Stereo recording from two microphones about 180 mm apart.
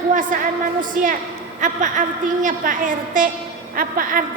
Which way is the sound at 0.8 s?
50° right (ahead or behind).